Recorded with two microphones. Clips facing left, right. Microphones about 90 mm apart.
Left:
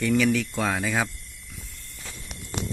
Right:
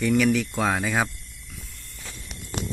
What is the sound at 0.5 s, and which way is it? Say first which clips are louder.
Speech: right 2 dB; 15° right (ahead or behind).